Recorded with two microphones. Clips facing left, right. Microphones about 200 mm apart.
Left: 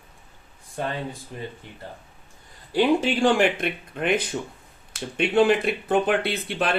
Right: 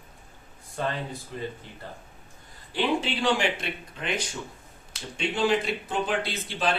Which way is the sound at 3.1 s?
50° left (ahead or behind).